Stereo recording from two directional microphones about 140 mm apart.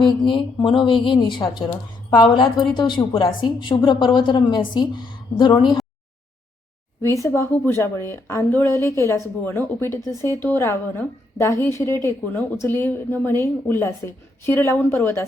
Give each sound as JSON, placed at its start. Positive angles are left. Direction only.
{"t": 0.0, "sound": "a woman's voice", "side_deg": 35}
{"t": 7.0, "sound": "a woman's voice", "side_deg": 20}